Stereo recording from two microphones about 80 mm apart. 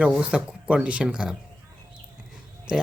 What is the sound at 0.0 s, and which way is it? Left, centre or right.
A man's voice, centre.